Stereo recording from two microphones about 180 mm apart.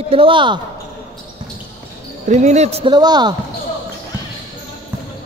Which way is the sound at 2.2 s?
40° right (ahead or behind).